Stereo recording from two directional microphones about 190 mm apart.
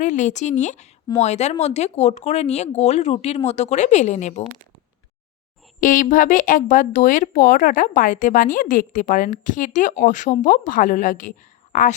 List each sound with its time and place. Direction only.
0.0 s speech: 40° left (ahead or behind)
5.8 s speech: 45° left (ahead or behind)